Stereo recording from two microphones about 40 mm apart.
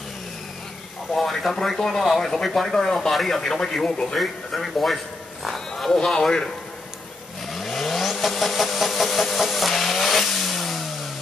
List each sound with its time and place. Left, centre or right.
1.1 s speech: centre
4.2 s a man's voice: centre
6.0 s speech: centre
7.5 s vehicle: centre